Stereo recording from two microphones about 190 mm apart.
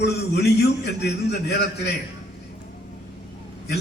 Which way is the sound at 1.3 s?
65° left (ahead or behind).